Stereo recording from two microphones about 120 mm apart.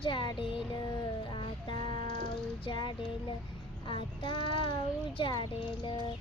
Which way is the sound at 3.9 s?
45° left (ahead or behind).